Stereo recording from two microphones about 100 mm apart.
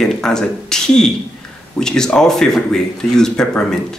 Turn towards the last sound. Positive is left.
turn(degrees=5)  # may be behind; listen again after turning